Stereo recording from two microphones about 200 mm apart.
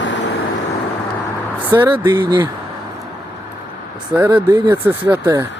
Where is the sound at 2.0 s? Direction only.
20° right (ahead or behind).